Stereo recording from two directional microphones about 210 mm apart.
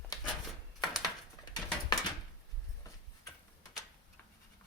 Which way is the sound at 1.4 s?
20° left (ahead or behind).